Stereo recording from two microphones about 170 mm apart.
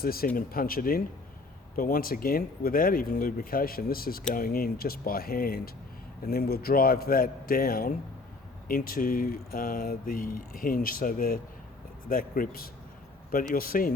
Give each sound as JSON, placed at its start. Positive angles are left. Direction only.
{"t": 0.0, "sound": "speech", "side_deg": 60}